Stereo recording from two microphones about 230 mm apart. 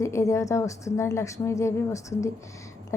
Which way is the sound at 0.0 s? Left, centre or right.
Centre.